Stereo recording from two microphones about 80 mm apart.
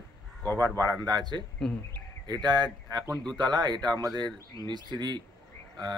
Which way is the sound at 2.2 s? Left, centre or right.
Right.